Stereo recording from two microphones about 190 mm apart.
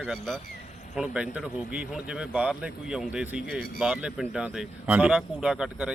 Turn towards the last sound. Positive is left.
turn(degrees=-5)  # may be behind; listen again after turning